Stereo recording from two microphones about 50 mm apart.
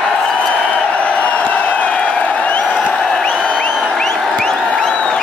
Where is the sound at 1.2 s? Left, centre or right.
Left.